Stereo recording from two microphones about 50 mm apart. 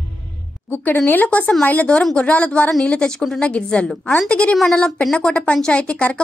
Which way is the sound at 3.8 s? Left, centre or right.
Centre.